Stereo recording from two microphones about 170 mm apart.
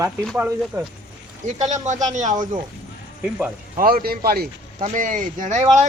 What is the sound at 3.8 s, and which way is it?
Speech, 60° right (ahead or behind).